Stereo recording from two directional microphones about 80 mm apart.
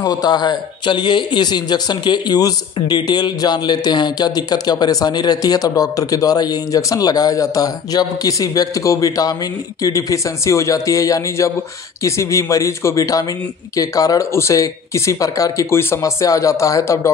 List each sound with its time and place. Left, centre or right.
0.0 s a man's voice: left
16.0 s a man's voice: left